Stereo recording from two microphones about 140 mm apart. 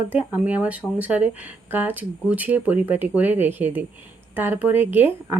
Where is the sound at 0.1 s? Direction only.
10° right (ahead or behind).